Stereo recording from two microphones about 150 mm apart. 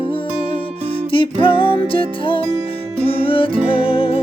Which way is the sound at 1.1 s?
35° left (ahead or behind).